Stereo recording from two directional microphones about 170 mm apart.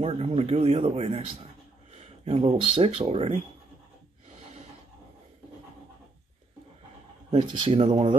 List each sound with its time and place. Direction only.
0.0 s speech: 35° right (ahead or behind)
7.2 s speech: 30° right (ahead or behind)